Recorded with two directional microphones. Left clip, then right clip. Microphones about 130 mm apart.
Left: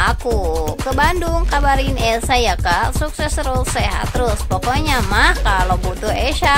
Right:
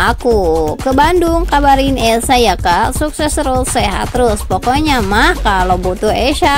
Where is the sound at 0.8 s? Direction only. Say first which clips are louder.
Right 6 dB; 30° right (ahead or behind).